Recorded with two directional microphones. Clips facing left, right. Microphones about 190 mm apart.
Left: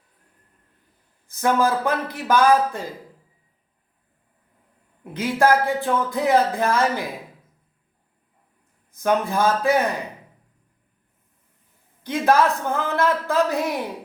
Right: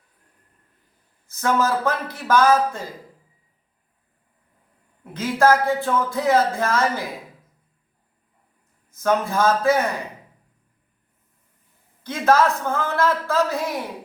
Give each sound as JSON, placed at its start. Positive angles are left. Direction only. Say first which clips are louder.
{"t": 1.4, "sound": "speech", "louder": "left 1 dB", "side_deg": 15}
{"t": 5.1, "sound": "speech", "louder": "right 1 dB", "side_deg": 15}
{"t": 8.9, "sound": "speech", "louder": "even", "side_deg": 15}
{"t": 12.0, "sound": "speech", "louder": "even", "side_deg": 15}